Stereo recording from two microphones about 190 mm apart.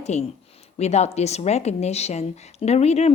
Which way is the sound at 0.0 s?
35° left (ahead or behind).